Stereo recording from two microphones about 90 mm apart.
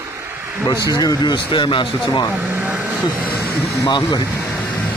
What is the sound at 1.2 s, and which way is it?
Speech, 60° left (ahead or behind).